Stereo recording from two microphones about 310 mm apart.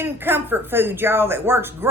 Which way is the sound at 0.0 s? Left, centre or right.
Centre.